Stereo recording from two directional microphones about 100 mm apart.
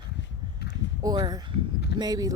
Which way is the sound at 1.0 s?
45° right (ahead or behind).